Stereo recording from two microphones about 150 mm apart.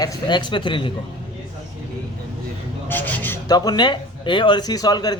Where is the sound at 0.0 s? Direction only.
25° left (ahead or behind).